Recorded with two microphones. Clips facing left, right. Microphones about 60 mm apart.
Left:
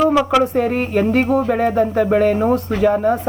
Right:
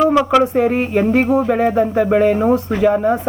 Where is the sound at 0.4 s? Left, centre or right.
Centre.